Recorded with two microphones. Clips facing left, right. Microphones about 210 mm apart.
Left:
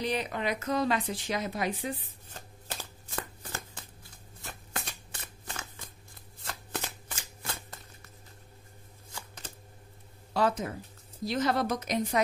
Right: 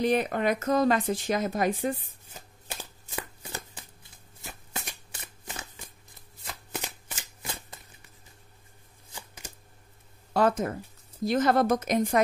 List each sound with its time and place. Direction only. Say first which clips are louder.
0.0 s speech: right 6 dB; 50° right (ahead or behind)
2.2 s shuffling cards: even; 10° right (ahead or behind)
9.1 s shuffling cards: even; 15° right (ahead or behind)
10.3 s speech: right 4 dB; 50° right (ahead or behind)